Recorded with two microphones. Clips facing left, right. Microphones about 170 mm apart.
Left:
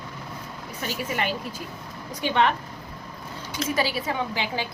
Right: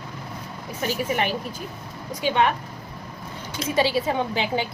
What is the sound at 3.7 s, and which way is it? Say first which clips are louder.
Speech: right 5 dB; 25° right (ahead or behind).